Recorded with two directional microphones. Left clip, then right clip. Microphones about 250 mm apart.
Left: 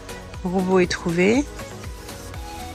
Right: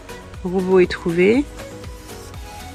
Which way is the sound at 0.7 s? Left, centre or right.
Centre.